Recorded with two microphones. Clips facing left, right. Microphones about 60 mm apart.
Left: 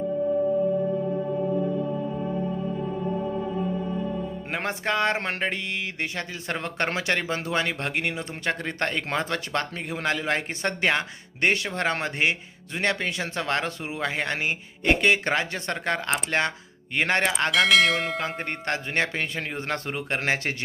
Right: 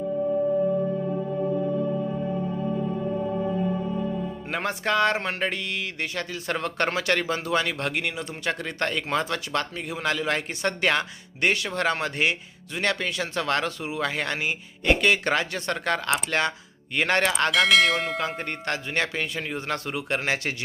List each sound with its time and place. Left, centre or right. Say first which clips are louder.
4.5 s speech: right 2 dB; left
17.5 s bell: left 1 dB; centre
18.2 s speech: right 1 dB; left